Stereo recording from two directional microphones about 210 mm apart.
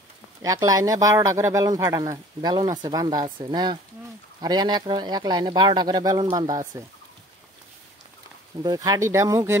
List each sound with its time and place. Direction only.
0.4 s speech: 15° right (ahead or behind)
8.6 s speech: 15° right (ahead or behind)